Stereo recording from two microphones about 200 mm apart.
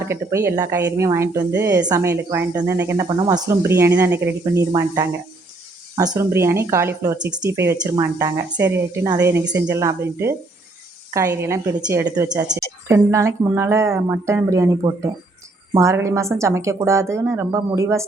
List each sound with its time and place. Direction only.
0.1 s speech: 15° right (ahead or behind)